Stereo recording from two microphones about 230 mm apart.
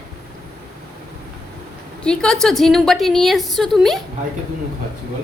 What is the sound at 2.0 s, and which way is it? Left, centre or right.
A woman's voice, centre.